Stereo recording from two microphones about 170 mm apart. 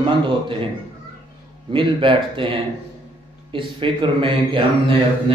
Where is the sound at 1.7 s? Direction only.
30° right (ahead or behind).